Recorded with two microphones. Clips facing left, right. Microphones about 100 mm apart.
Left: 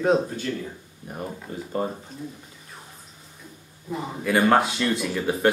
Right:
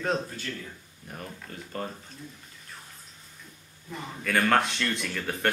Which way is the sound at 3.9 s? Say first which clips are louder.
Left 5 dB; 15° left (ahead or behind).